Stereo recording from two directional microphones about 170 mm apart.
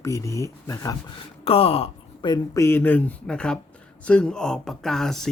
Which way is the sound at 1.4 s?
35° left (ahead or behind).